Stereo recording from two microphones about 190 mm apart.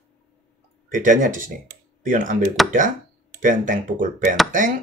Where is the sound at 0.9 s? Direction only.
45° right (ahead or behind).